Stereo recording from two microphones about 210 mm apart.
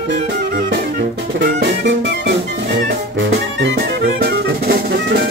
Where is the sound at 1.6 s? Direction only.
60° right (ahead or behind).